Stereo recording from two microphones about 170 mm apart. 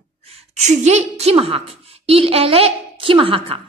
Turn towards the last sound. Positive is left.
turn(degrees=-30)  # may be behind; listen again after turning